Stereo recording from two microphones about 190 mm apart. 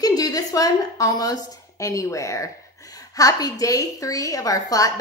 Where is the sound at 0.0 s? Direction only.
20° left (ahead or behind).